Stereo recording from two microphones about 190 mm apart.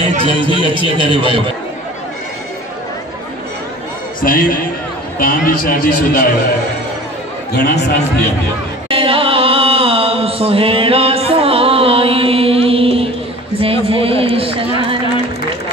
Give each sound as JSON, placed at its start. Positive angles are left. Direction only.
{"t": 0.1, "sound": "a man's voice", "side_deg": -30}
{"t": 0.9, "sound": "a man's voice", "side_deg": 25}
{"t": 4.2, "sound": "a man's voice", "side_deg": 50}
{"t": 7.5, "sound": "speech", "side_deg": 60}
{"t": 8.8, "sound": "chant", "side_deg": -30}
{"t": 13.6, "sound": "a man's voice", "side_deg": -30}